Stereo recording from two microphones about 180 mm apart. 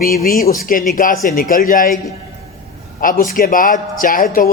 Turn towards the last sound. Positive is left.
turn(degrees=50)  # may be behind; listen again after turning